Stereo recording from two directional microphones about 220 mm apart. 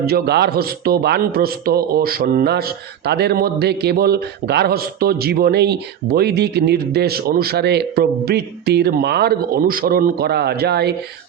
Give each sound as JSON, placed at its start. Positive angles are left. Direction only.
{"t": 0.0, "sound": "a man's voice", "side_deg": -45}